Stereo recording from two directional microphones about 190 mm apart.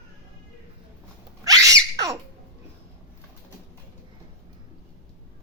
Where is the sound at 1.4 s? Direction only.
20° right (ahead or behind).